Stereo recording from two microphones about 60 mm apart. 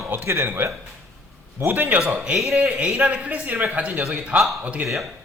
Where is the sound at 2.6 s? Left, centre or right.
Centre.